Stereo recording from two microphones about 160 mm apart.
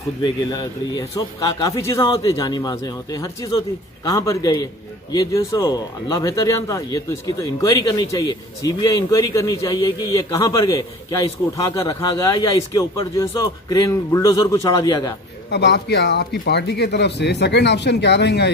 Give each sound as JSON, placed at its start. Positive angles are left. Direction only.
{"t": 0.2, "sound": "speech", "side_deg": 25}
{"t": 15.5, "sound": "speech", "side_deg": 90}